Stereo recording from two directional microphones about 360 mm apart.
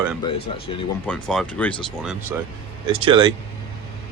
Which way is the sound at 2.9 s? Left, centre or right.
Centre.